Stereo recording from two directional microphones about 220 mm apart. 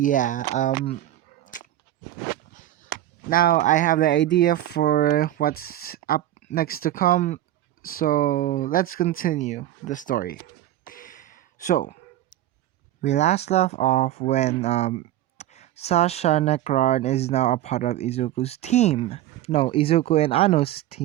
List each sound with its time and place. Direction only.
0.0 s speech: 35° left (ahead or behind)
2.5 s a sound: 35° left (ahead or behind)
4.1 s speech: 55° left (ahead or behind)
4.4 s speech: 45° left (ahead or behind)
10.8 s a sound: 40° left (ahead or behind)
13.0 s speech: 30° left (ahead or behind)